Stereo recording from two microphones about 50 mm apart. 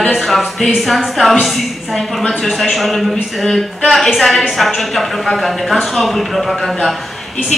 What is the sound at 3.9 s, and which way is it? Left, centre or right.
A woman's voice, centre.